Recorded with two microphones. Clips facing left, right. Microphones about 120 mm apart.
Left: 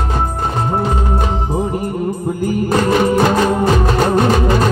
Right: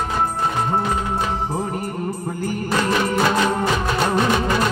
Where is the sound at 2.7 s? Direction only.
45° left (ahead or behind).